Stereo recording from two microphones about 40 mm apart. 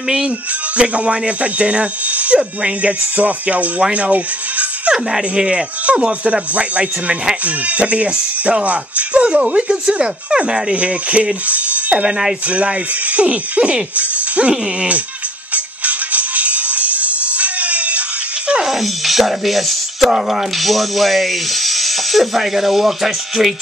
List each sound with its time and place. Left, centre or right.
0.7 s speech: right
4.9 s speech: centre; by 15.0 s right
15.5 s music: right
18.6 s music: centre
20.1 s speech: centre